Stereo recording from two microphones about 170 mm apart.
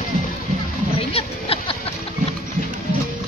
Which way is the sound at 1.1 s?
35° left (ahead or behind).